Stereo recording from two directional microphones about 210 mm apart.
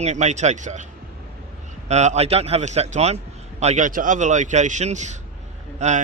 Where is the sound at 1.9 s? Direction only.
35° right (ahead or behind).